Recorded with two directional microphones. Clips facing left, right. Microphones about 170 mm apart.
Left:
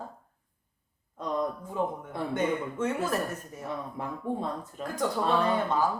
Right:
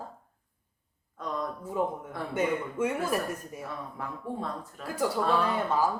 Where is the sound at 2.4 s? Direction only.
10° right (ahead or behind).